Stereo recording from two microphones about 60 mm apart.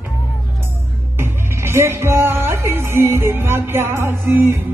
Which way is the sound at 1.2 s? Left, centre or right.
Right.